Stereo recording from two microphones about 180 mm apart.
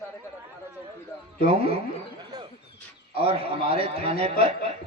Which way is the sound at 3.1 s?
35° right (ahead or behind).